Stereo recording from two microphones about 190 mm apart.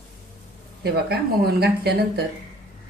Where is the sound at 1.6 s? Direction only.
60° right (ahead or behind).